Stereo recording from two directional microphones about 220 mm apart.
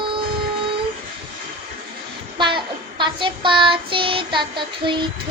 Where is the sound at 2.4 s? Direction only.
20° right (ahead or behind).